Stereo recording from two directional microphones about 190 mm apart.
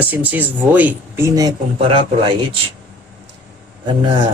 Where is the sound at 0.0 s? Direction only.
10° right (ahead or behind).